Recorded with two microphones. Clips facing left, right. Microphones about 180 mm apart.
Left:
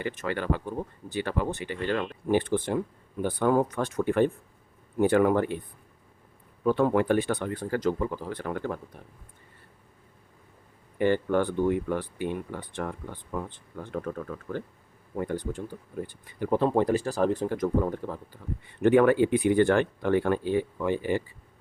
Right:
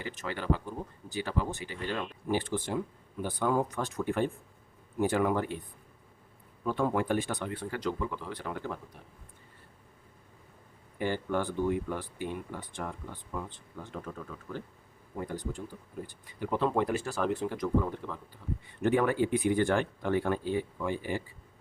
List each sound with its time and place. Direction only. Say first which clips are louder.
0.0 s speech: left 6 dB; 60° left (ahead or behind)
6.7 s speech: left 6 dB; 65° left (ahead or behind)
10.9 s speech: left 7 dB; 60° left (ahead or behind)
16.4 s speech: left 5 dB; 40° left (ahead or behind)
18.8 s speech: left 7 dB; 70° left (ahead or behind)